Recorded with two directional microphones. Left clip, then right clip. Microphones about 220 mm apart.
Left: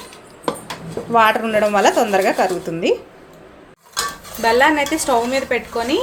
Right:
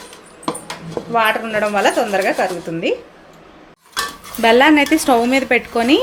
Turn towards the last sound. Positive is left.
turn(degrees=-30)  # may be behind; listen again after turning